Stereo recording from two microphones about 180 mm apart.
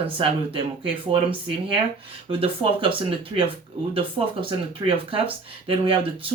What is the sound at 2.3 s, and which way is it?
Speech, 30° right (ahead or behind).